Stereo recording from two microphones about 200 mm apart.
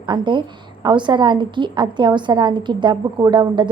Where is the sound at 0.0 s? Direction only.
25° right (ahead or behind).